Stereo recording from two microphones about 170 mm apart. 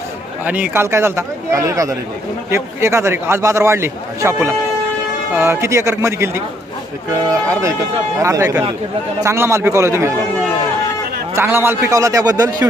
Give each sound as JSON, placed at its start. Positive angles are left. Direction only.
{"t": 0.4, "sound": "a man's voice", "side_deg": -10}
{"t": 11.3, "sound": "a man's voice", "side_deg": -15}